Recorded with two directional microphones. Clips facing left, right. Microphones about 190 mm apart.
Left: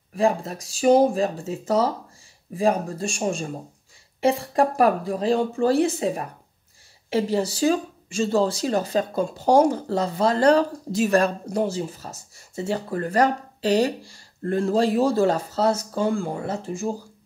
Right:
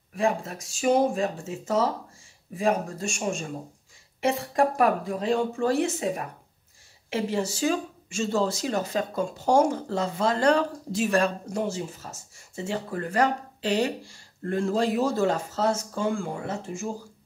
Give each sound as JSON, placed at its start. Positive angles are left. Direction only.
{"t": 0.1, "sound": "speech", "side_deg": 35}